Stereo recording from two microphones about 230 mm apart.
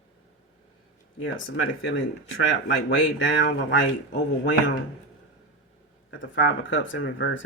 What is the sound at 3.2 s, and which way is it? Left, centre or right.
A man's voice, left.